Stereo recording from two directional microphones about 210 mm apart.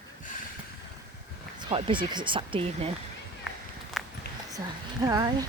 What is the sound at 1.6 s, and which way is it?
Speech, 25° right (ahead or behind).